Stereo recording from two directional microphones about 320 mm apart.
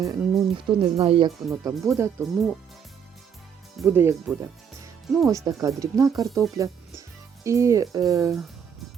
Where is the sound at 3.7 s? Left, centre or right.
Centre.